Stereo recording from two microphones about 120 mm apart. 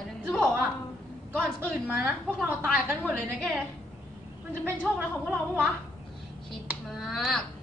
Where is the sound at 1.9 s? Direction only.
15° right (ahead or behind).